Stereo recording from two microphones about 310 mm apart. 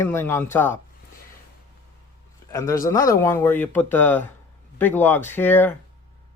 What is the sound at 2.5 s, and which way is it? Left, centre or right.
Speech, centre.